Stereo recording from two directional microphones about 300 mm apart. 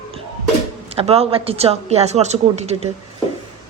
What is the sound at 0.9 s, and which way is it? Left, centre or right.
A woman's voice, centre.